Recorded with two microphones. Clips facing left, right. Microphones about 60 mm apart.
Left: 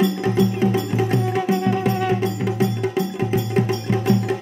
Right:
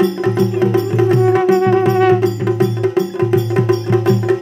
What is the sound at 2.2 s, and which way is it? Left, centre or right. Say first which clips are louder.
Music: right 6 dB; right.